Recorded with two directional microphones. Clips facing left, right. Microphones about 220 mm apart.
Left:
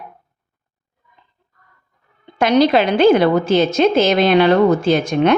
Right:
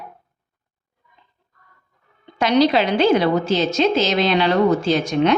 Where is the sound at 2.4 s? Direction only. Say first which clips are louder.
Left 3 dB; 50° left (ahead or behind).